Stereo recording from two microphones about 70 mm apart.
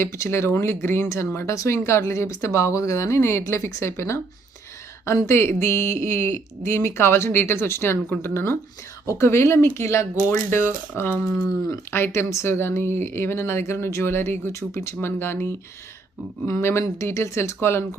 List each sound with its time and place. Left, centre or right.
0.0 s speech: left
5.3 s speech: left